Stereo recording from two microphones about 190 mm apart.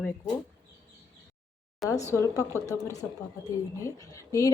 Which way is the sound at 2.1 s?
15° left (ahead or behind).